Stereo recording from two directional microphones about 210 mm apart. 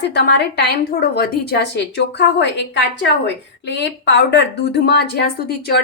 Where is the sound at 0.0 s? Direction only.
55° left (ahead or behind).